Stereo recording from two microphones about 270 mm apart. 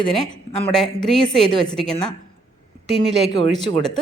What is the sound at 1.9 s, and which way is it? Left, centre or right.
Speech, centre.